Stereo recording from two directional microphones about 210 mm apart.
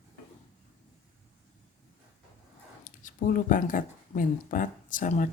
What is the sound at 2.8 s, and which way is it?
A woman's voice, 40° left (ahead or behind).